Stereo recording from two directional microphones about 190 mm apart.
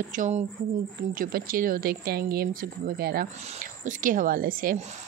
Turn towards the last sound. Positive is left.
turn(degrees=-50)  # may be behind; listen again after turning